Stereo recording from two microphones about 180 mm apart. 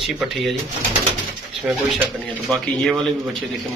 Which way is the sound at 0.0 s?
Centre (ahead or behind).